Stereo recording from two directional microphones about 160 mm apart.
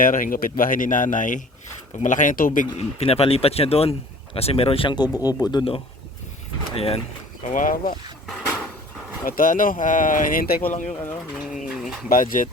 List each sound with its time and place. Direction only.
0.0 s speech: 60° left (ahead or behind)
2.7 s speech: 40° left (ahead or behind)
7.4 s speech: 55° left (ahead or behind)
9.2 s speech: 60° left (ahead or behind)
10.7 s speech: 50° left (ahead or behind)
11.3 s pigeon: centre (ahead or behind)
12.0 s speech: 60° left (ahead or behind)